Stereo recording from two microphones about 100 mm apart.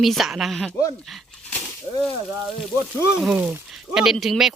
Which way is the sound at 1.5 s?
10° left (ahead or behind).